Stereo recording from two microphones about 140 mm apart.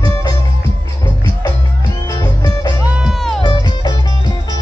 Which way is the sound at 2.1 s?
30° left (ahead or behind).